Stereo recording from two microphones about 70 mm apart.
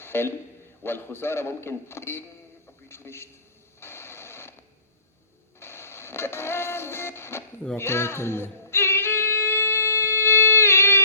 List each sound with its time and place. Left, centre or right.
0.0 s a sound: left
0.8 s a man's voice: left
3.8 s mechanisms: left
5.5 s music: left